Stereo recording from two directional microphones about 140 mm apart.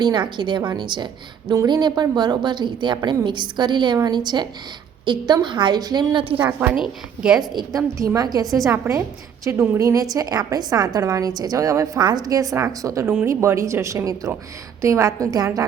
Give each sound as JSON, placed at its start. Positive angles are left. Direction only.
{"t": 0.0, "sound": "a woman's voice", "side_deg": -30}
{"t": 6.4, "sound": "a woman's voice", "side_deg": -10}
{"t": 7.9, "sound": "a woman's voice", "side_deg": -25}